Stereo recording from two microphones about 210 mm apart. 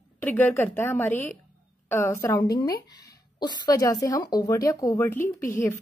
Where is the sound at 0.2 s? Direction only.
10° left (ahead or behind).